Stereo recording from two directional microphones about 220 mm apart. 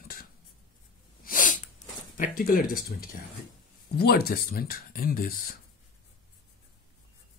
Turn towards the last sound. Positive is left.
turn(degrees=40)  # may be behind; listen again after turning